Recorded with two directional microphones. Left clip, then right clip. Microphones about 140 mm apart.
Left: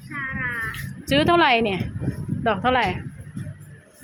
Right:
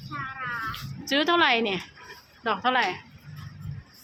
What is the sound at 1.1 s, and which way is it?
A woman's voice, 30° left (ahead or behind).